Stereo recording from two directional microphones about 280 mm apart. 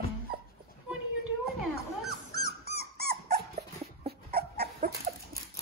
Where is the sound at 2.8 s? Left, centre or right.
Right.